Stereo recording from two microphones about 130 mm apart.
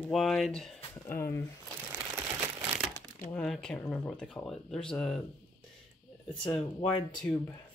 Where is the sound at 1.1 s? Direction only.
20° left (ahead or behind).